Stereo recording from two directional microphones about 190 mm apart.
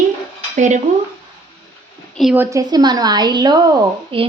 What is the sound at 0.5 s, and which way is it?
Dishes, 40° right (ahead or behind).